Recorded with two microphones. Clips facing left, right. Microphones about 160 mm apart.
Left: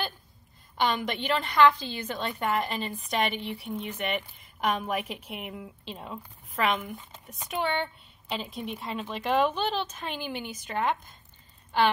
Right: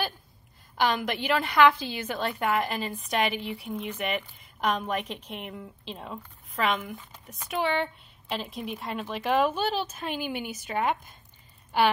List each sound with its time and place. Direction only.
0.7 s a woman's voice: 5° right (ahead or behind)